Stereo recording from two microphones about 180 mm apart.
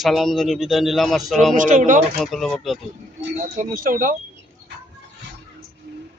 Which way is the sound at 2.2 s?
Centre (ahead or behind).